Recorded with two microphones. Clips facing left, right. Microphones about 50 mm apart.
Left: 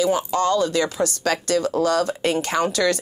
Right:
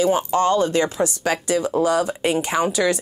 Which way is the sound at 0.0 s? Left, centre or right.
Right.